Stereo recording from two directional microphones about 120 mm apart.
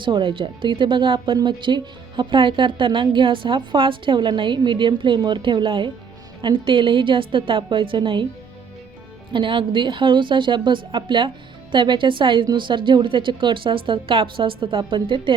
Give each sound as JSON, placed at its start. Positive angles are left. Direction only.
{"t": 0.0, "sound": "speech", "side_deg": -45}
{"t": 9.3, "sound": "speech", "side_deg": -45}